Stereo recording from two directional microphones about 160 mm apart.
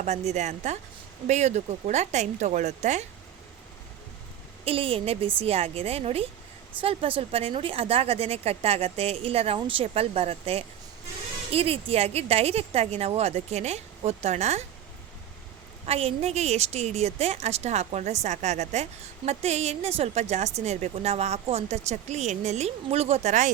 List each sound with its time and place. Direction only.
0.0 s a woman's voice: 45° right (ahead or behind)
4.6 s a woman's voice: 35° right (ahead or behind)
15.9 s a woman's voice: 40° right (ahead or behind)